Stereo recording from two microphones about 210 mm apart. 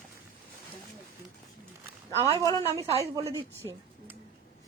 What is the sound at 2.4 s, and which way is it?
Speech, 15° left (ahead or behind).